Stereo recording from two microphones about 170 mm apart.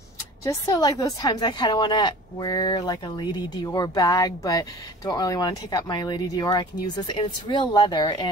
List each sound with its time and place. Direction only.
0.5 s speech: 20° left (ahead or behind)